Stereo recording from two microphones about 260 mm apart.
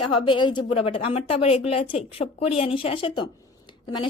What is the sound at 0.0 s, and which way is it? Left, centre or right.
Speech, centre.